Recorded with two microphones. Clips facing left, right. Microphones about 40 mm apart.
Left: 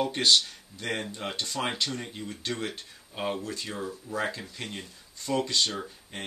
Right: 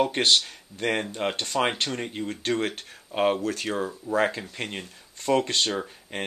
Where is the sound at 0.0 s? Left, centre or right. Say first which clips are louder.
Right 2 dB; right.